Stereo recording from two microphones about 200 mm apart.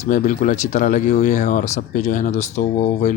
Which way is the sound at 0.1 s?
40° left (ahead or behind).